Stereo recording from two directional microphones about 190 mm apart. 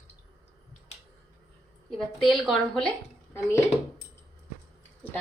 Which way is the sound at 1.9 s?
Centre (ahead or behind).